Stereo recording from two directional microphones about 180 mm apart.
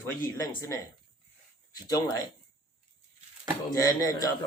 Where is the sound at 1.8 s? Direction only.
20° left (ahead or behind).